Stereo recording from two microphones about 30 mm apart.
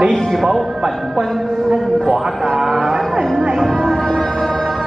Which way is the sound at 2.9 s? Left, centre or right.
Centre.